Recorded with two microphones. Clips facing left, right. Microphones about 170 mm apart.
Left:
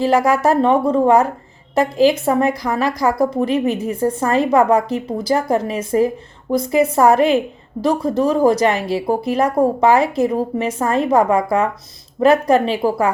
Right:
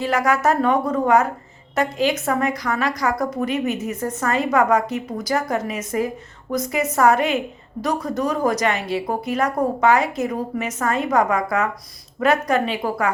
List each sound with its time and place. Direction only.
0.3 s a woman's voice: 35° left (ahead or behind)